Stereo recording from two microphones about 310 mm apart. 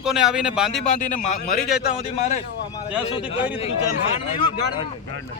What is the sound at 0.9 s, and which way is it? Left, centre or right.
Speech, left.